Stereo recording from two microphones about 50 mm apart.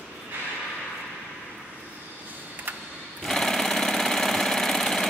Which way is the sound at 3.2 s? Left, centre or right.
Centre.